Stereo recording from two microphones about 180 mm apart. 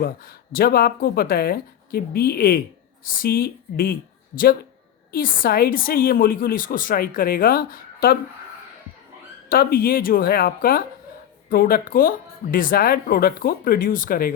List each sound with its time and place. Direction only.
0.0 s speech: 55° left (ahead or behind)
5.1 s speech: 55° left (ahead or behind)
9.5 s speech: 55° left (ahead or behind)